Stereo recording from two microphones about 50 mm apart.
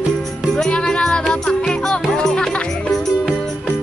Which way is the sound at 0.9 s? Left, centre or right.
Centre.